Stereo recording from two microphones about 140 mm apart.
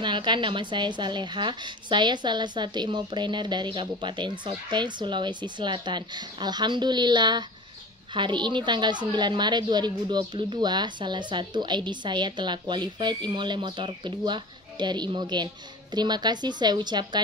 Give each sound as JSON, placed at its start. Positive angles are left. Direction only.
{"t": 0.0, "sound": "a woman's voice", "side_deg": -35}